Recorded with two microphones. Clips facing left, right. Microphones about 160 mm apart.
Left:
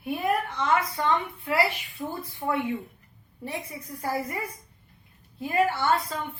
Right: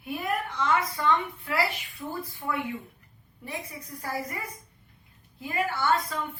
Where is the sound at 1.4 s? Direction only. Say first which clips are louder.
Left 5 dB; 25° left (ahead or behind).